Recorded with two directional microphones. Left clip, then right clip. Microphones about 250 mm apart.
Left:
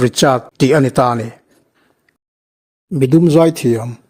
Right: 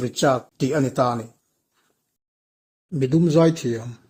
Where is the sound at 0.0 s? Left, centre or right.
Left.